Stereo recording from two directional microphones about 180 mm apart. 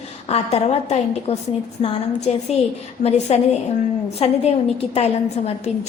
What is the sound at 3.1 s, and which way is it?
A woman's voice, 35° left (ahead or behind).